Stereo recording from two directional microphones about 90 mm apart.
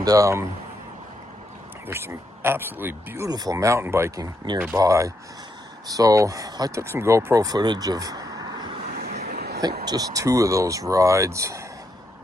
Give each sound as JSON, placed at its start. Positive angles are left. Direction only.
{"t": 0.0, "sound": "speech", "side_deg": -40}
{"t": 1.9, "sound": "speech", "side_deg": -25}
{"t": 3.2, "sound": "speech", "side_deg": -45}
{"t": 7.3, "sound": "speech", "side_deg": -45}